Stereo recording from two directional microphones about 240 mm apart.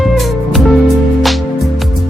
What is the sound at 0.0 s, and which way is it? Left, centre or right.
Music, centre.